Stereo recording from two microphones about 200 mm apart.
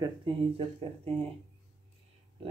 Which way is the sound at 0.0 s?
25° right (ahead or behind).